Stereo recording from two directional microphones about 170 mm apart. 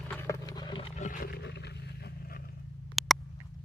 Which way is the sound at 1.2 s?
75° left (ahead or behind).